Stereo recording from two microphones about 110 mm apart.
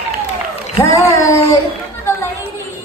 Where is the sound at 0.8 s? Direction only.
25° left (ahead or behind).